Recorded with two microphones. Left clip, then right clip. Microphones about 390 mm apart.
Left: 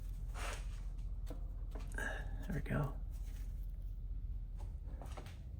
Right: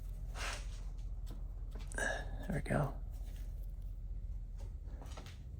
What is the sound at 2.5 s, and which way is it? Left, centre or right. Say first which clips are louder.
Speech: right 5 dB; centre.